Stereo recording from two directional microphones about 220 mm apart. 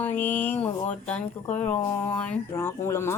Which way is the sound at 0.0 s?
10° left (ahead or behind).